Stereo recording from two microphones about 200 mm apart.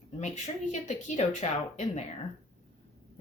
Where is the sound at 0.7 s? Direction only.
35° left (ahead or behind).